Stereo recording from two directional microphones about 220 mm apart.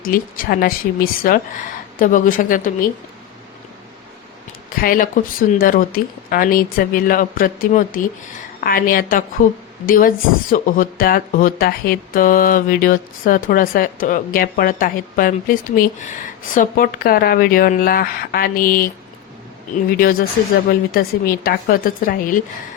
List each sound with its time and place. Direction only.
0.0 s speech: 40° left (ahead or behind)
4.8 s speech: 40° left (ahead or behind)
20.0 s speech: 40° left (ahead or behind)